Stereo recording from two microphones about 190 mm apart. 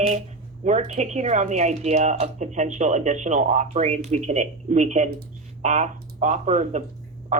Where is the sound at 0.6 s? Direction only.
35° right (ahead or behind).